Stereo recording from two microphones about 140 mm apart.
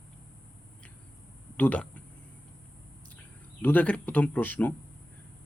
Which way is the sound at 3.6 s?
10° left (ahead or behind).